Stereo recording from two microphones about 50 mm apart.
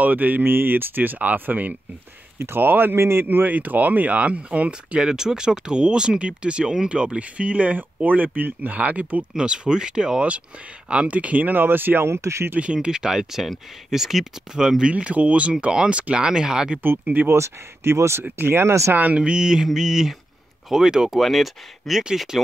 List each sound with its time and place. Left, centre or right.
0.0 s speech: right
2.3 s speech: right
2.6 s speech: right
3.0 s speech: right
9.3 s speech: centre; by 12.1 s right
12.1 s speech: right
12.5 s speech: right
14.9 s speech: right
17.3 s speech: right
18.2 s speech: right
19.1 s speech: centre
21.2 s speech: centre